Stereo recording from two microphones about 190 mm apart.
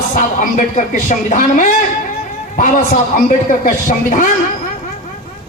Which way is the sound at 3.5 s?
45° left (ahead or behind).